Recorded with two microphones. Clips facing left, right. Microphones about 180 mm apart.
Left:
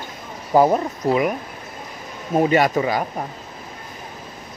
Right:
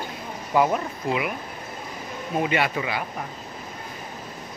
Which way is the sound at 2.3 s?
40° left (ahead or behind).